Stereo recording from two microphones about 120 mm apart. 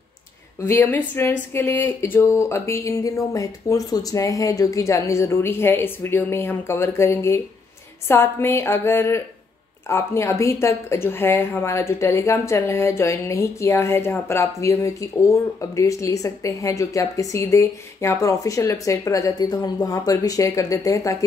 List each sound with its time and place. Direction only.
0.6 s speech: 20° left (ahead or behind)